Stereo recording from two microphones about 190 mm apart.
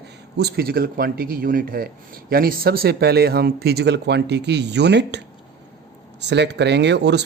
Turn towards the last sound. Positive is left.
turn(degrees=-65)  # may be behind; listen again after turning